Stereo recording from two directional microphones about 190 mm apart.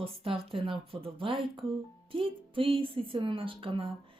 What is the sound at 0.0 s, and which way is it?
Speech, 30° right (ahead or behind).